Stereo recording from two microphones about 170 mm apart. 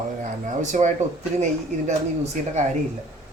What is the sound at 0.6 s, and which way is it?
A woman's voice, 45° right (ahead or behind).